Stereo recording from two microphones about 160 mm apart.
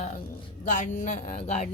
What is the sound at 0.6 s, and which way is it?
A woman's voice, 50° left (ahead or behind).